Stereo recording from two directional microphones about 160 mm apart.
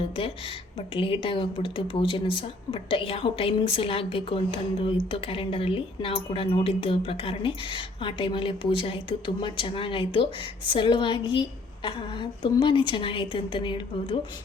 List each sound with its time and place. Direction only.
0.2 s a woman's voice: 35° left (ahead or behind)